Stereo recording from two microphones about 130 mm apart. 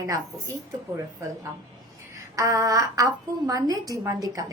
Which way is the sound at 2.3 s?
25° right (ahead or behind).